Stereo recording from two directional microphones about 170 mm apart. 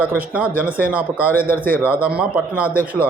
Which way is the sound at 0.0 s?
10° right (ahead or behind).